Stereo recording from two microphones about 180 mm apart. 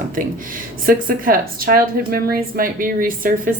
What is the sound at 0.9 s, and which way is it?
A woman's voice, 50° right (ahead or behind).